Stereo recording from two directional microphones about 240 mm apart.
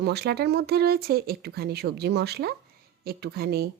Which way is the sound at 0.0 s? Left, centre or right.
Right.